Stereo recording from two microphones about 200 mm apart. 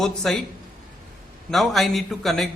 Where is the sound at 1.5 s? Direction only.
Centre (ahead or behind).